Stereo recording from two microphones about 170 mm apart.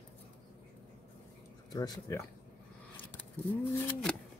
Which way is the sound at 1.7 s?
20° left (ahead or behind).